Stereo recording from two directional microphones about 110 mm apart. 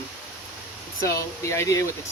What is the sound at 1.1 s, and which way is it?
Speech, 30° left (ahead or behind).